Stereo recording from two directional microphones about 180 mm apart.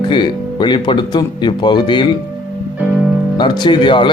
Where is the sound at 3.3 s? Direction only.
25° left (ahead or behind).